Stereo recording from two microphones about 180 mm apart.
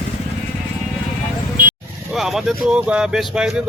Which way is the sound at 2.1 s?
Centre (ahead or behind).